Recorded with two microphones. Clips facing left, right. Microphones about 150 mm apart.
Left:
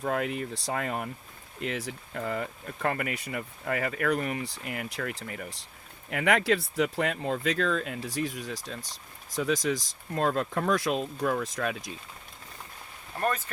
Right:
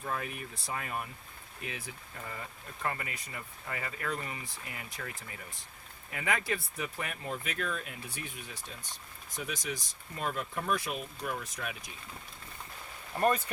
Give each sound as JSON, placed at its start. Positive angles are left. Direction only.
{"t": 0.0, "sound": "speech", "side_deg": 90}
{"t": 13.1, "sound": "speech", "side_deg": -10}